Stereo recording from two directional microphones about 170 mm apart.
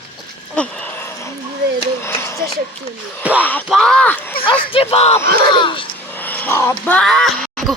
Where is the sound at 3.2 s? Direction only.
10° right (ahead or behind).